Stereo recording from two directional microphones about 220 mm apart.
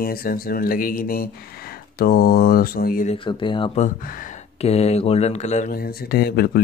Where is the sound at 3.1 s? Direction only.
20° left (ahead or behind).